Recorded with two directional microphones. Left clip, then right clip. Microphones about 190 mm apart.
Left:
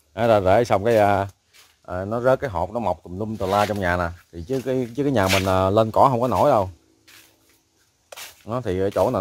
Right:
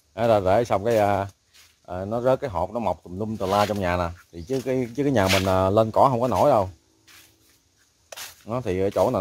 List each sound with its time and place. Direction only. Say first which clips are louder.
0.1 s speech: left 2 dB; 20° left (ahead or behind)
3.0 s speech: left 1 dB; 5° left (ahead or behind)
3.3 s speech: left 1 dB; 15° left (ahead or behind)
6.2 s speech: left 1 dB; 5° left (ahead or behind)
8.5 s speech: left 1 dB; 10° left (ahead or behind)